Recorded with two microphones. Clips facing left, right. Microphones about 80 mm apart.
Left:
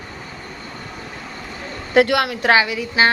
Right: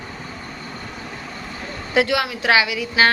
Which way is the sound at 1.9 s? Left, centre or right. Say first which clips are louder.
Left 4 dB; left.